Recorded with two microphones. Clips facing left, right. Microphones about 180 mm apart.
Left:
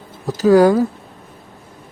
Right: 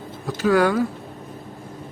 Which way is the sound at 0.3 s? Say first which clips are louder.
Left 7 dB; 40° left (ahead or behind).